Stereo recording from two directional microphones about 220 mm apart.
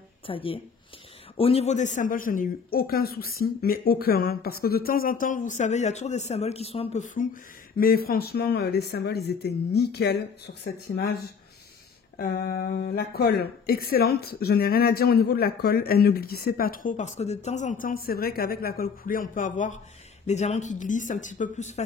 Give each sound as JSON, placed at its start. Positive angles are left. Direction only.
{"t": 0.3, "sound": "a man's voice", "side_deg": 25}
{"t": 7.7, "sound": "speech", "side_deg": 45}
{"t": 12.2, "sound": "a man's voice", "side_deg": 45}